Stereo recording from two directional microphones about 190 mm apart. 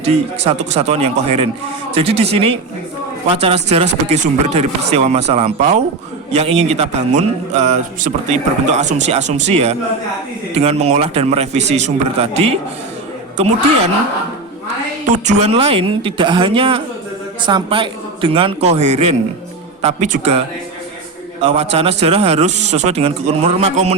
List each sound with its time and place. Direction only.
0.0 s a man's voice: 35° right (ahead or behind)
15.1 s a man's voice: 35° right (ahead or behind)
21.4 s a man's voice: 30° right (ahead or behind)